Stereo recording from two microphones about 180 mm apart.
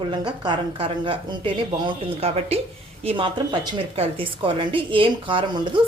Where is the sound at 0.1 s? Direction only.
25° right (ahead or behind).